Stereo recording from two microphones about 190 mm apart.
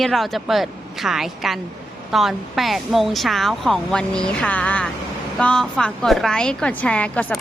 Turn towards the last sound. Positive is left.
turn(degrees=5)  # may be behind; listen again after turning